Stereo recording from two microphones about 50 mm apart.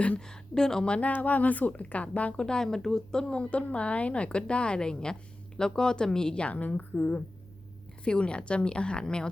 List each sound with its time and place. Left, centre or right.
0.2 s a woman's voice: centre
2.3 s speech: centre
6.5 s a woman's voice: left